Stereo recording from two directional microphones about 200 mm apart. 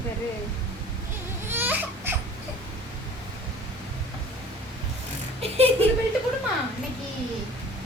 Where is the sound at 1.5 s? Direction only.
10° right (ahead or behind).